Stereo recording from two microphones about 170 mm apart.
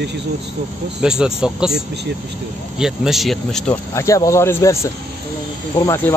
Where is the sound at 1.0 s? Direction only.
5° right (ahead or behind).